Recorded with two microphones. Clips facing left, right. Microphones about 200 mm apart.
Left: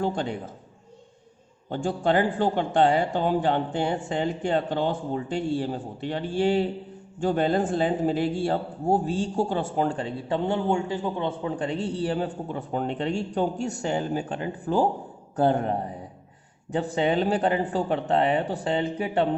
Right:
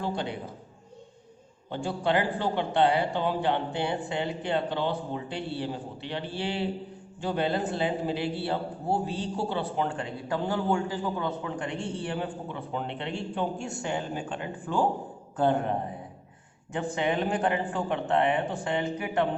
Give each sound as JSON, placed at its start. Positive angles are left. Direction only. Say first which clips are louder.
{"t": 0.0, "sound": "speech", "louder": "left 4 dB", "side_deg": 45}
{"t": 1.7, "sound": "a man's voice", "louder": "left 4 dB", "side_deg": 45}
{"t": 16.7, "sound": "a man's voice", "louder": "left 4 dB", "side_deg": 35}